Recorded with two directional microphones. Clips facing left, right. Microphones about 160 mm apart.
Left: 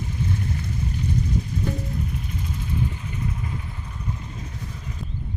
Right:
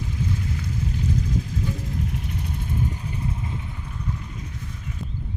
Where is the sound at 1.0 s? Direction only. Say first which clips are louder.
Left 1 dB; 90° right; by 2.7 s 60° right (ahead or behind).